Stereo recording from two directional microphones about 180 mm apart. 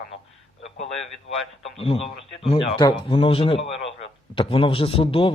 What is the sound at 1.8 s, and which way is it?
A man's voice, 35° left (ahead or behind).